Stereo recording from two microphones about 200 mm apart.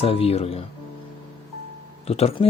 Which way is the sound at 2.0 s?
30° left (ahead or behind).